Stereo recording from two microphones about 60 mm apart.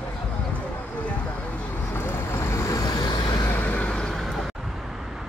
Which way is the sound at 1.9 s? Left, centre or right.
Left.